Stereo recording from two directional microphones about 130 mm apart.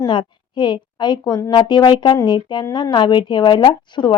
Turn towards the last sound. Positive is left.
turn(degrees=35)  # may be behind; listen again after turning